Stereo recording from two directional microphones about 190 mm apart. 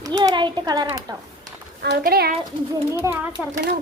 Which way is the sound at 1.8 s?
55° right (ahead or behind).